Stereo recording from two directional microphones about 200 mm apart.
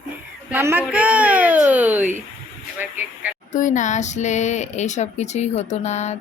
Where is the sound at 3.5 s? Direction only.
40° left (ahead or behind).